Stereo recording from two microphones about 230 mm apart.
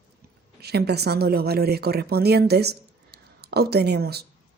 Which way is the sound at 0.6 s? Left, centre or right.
Right.